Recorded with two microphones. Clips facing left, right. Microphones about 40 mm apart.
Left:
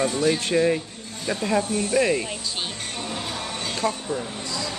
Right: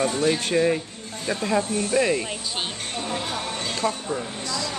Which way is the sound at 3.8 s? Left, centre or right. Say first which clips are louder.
Even; right.